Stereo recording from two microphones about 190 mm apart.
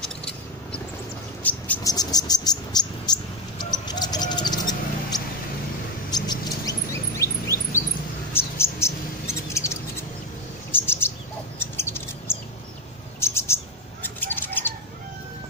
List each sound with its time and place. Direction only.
1.4 s bird: 10° left (ahead or behind)
1.9 s a sound: 20° left (ahead or behind)
6.1 s chirp: 20° left (ahead or behind)
8.3 s mouse: 10° left (ahead or behind)
10.7 s bird: 10° left (ahead or behind)
13.2 s bird: 15° left (ahead or behind)
14.0 s a sound: 10° left (ahead or behind)